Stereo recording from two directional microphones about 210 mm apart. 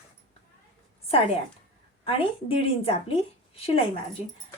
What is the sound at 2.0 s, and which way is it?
A woman's voice, 25° left (ahead or behind).